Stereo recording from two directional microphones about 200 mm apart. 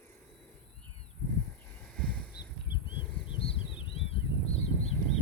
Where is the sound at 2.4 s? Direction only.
50° left (ahead or behind).